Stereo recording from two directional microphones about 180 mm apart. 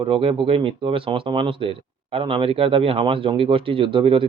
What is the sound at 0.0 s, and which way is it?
Speech, 30° right (ahead or behind).